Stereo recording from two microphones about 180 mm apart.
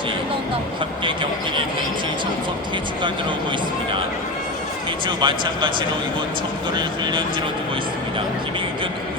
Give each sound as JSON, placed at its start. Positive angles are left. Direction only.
{"t": 1.0, "sound": "speech", "side_deg": -30}
{"t": 5.0, "sound": "speech", "side_deg": -25}
{"t": 6.7, "sound": "speech", "side_deg": -25}